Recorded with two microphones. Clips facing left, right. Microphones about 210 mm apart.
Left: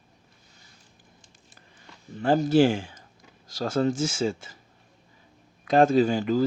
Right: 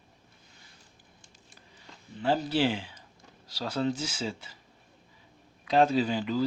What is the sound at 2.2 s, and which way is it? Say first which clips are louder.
Speech: left 7 dB; 45° left (ahead or behind).